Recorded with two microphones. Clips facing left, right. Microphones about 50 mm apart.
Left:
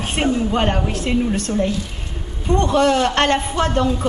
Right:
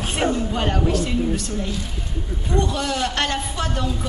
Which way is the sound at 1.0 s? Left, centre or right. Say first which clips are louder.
Left 3 dB; left.